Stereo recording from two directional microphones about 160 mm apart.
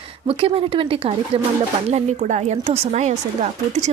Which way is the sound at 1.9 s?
45° right (ahead or behind).